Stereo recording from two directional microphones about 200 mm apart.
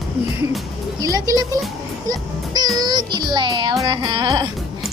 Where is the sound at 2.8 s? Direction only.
20° right (ahead or behind).